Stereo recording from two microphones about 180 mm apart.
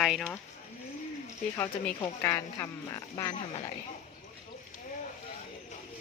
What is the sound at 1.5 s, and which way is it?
Speech, 15° left (ahead or behind).